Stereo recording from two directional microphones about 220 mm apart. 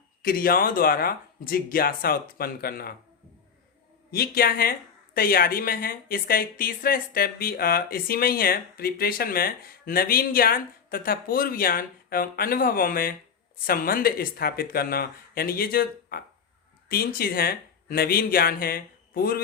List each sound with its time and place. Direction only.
0.2 s speech: 40° left (ahead or behind)
4.1 s speech: 45° left (ahead or behind)